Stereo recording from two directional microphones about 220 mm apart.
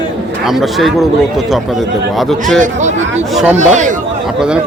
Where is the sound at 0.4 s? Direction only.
Centre (ahead or behind).